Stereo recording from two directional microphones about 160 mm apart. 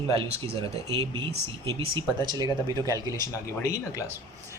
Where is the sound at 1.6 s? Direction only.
30° right (ahead or behind).